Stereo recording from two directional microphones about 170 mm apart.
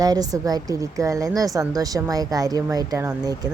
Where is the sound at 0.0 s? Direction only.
20° right (ahead or behind).